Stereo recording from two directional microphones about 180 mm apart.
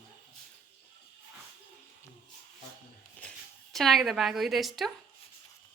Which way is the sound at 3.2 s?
5° left (ahead or behind).